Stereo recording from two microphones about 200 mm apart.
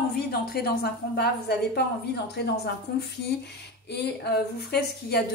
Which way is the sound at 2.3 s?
55° left (ahead or behind).